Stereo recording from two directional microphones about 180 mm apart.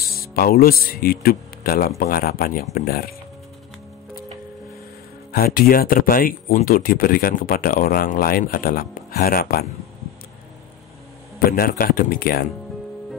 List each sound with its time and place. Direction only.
0.0 s a man's voice: 60° left (ahead or behind)
5.3 s speech: 55° left (ahead or behind)
11.3 s a man's voice: 55° left (ahead or behind)